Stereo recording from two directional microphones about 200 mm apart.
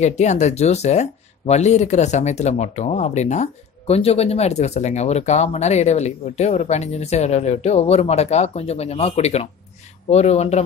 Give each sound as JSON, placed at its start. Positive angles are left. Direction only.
{"t": 0.0, "sound": "speech", "side_deg": 35}